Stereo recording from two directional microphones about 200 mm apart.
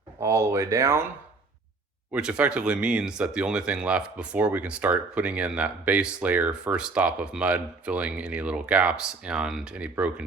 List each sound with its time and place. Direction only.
0.2 s speech: 15° right (ahead or behind)
2.1 s speech: 5° right (ahead or behind)